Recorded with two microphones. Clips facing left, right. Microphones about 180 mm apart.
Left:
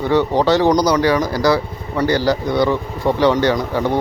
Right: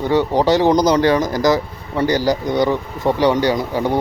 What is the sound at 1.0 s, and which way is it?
Speech, 30° right (ahead or behind).